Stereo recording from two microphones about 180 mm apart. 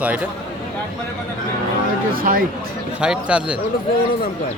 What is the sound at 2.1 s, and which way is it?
Speech, 50° right (ahead or behind).